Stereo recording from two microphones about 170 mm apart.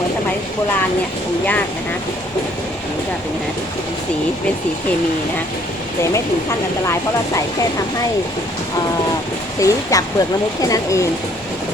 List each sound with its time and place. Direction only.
9.6 s speech: 20° left (ahead or behind)